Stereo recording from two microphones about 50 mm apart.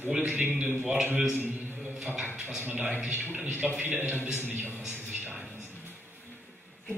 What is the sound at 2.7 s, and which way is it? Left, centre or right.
A man's voice, right.